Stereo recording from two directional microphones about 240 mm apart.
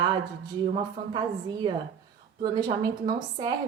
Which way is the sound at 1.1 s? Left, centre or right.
Centre.